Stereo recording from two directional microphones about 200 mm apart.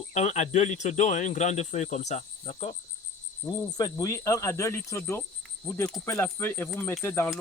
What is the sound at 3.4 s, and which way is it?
Speech, 20° left (ahead or behind).